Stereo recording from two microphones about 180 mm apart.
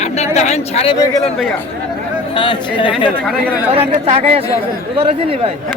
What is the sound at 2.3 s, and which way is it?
Speech, 25° left (ahead or behind).